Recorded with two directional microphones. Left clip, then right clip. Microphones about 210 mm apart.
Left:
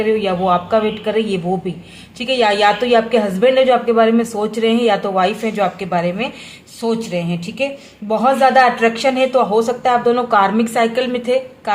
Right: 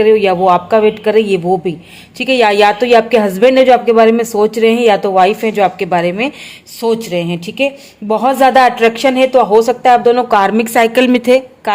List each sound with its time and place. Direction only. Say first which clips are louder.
0.0 s speech: right 7 dB; 35° right (ahead or behind)